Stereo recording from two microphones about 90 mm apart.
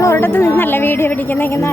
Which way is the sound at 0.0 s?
30° left (ahead or behind).